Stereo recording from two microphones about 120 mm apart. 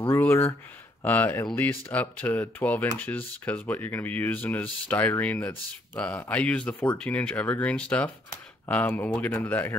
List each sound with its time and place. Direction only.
0.1 s speech: 20° left (ahead or behind)